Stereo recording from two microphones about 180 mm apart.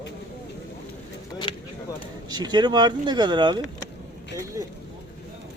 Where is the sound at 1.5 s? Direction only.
30° left (ahead or behind).